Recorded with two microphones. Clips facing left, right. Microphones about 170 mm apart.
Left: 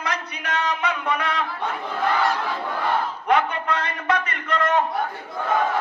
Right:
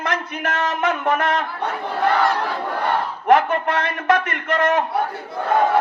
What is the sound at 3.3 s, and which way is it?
Speech, 50° right (ahead or behind).